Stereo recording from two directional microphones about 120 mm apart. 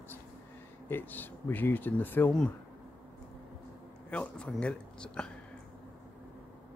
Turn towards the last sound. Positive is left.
turn(degrees=10)  # may be behind; listen again after turning